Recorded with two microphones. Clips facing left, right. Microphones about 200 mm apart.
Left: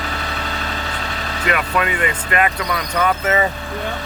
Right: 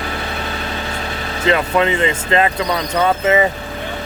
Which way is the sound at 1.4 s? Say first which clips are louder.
Right 5 dB; 25° right (ahead or behind).